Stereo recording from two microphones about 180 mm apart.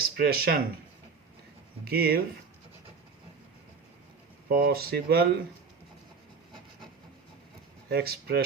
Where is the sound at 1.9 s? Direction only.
60° right (ahead or behind).